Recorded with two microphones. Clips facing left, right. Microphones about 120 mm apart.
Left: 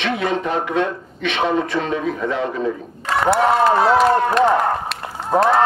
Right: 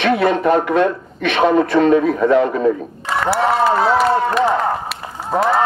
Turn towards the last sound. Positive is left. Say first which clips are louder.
# left 1 dB
turn(degrees=0)  # may be behind; listen again after turning